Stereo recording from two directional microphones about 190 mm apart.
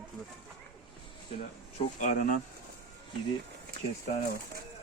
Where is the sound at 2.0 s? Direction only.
45° left (ahead or behind).